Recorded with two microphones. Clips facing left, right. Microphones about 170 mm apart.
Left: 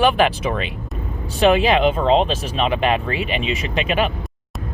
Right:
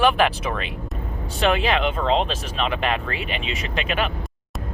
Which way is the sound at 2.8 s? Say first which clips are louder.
Left 5 dB; 5° left (ahead or behind).